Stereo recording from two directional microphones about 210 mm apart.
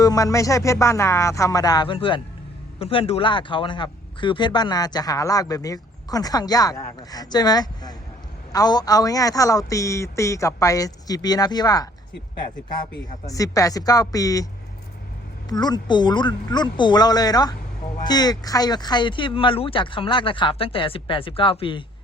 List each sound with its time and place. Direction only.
0.0 s a man's voice: 15° left (ahead or behind)
13.2 s a man's voice: 15° left (ahead or behind)
15.4 s speech: 20° left (ahead or behind)